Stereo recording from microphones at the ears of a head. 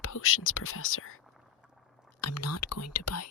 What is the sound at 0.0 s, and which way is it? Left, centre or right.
Speech, left.